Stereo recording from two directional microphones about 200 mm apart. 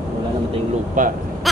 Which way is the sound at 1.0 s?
40° right (ahead or behind).